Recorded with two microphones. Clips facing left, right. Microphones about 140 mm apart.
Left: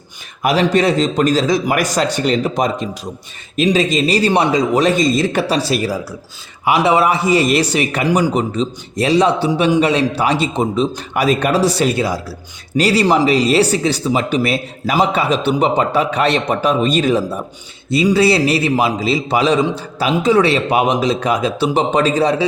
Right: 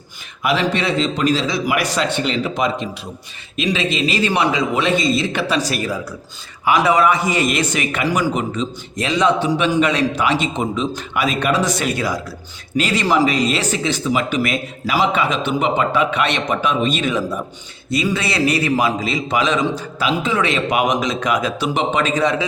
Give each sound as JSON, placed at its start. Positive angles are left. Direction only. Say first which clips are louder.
{"t": 0.4, "sound": "a man's voice", "louder": "left 5 dB", "side_deg": 40}